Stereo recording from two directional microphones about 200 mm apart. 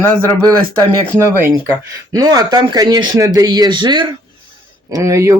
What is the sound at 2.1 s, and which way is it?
Speech, 20° right (ahead or behind).